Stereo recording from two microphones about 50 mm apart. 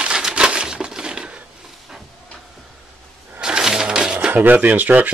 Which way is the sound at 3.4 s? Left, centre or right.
Centre.